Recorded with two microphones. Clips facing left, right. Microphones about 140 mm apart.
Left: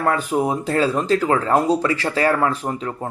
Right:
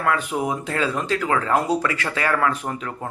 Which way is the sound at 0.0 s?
35° left (ahead or behind).